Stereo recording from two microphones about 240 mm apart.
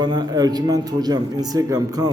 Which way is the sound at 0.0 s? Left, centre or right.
Centre.